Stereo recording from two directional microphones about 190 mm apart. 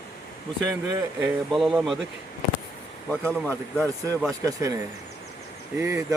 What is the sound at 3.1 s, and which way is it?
Speech, 10° left (ahead or behind).